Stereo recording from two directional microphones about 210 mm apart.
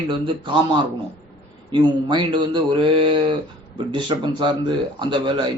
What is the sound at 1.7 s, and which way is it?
A man's voice, 20° right (ahead or behind).